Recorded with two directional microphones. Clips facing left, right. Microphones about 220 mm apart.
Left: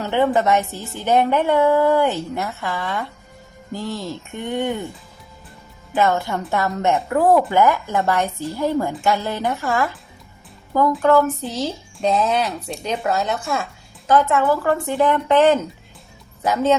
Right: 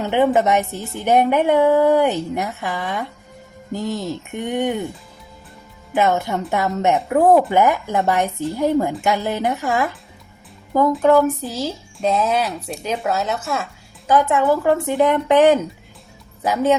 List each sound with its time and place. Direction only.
0.0 s a woman's voice: 15° right (ahead or behind)
5.9 s a woman's voice: 20° right (ahead or behind)
11.0 s speech: 15° right (ahead or behind)
14.1 s speech: 15° right (ahead or behind)